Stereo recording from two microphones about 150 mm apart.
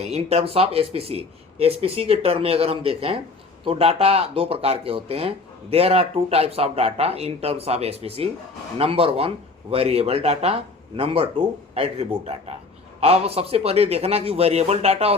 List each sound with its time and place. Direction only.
0.0 s speech: 45° right (ahead or behind)